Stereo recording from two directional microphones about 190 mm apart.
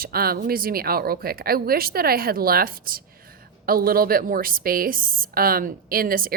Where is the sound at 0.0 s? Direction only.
50° right (ahead or behind).